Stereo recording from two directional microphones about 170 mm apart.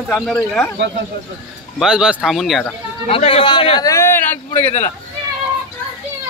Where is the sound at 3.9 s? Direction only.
15° left (ahead or behind).